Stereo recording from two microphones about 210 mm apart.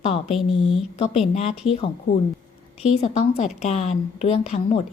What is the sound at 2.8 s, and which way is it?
A woman's voice, 30° left (ahead or behind).